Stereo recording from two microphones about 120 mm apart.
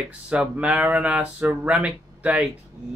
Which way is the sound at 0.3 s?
10° right (ahead or behind).